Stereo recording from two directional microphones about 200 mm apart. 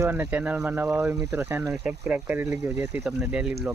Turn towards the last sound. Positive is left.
turn(degrees=-5)  # may be behind; listen again after turning